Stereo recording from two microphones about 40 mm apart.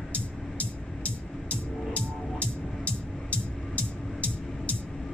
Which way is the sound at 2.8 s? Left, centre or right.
Left.